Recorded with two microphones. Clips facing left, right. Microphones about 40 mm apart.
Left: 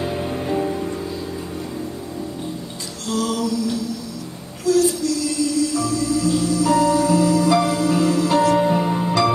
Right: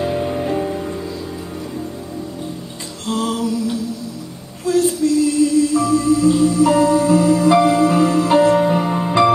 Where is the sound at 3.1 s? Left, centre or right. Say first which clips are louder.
Right 2 dB; right.